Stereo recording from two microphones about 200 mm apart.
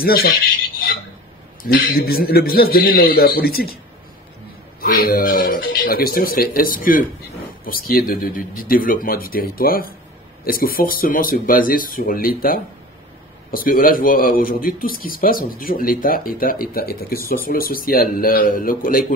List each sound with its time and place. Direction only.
0.0 s a man's voice: 50° left (ahead or behind)
4.7 s a man's voice: 50° left (ahead or behind)